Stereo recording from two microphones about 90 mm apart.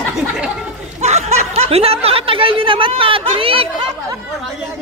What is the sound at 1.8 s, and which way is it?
Speech, 90° right.